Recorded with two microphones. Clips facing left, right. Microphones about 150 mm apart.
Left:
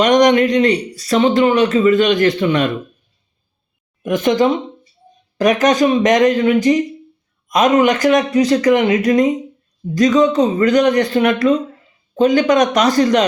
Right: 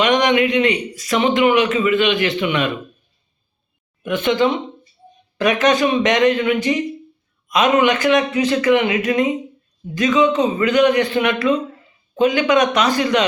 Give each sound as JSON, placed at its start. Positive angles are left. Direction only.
{"t": 0.0, "sound": "a man's voice", "side_deg": 40}
{"t": 4.0, "sound": "a man's voice", "side_deg": 40}